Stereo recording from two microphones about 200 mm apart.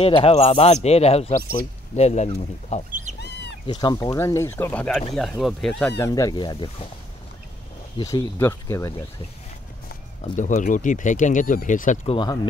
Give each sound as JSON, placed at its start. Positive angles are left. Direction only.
{"t": 0.0, "sound": "speech", "side_deg": 30}
{"t": 8.0, "sound": "speech", "side_deg": 15}
{"t": 10.3, "sound": "speech", "side_deg": 40}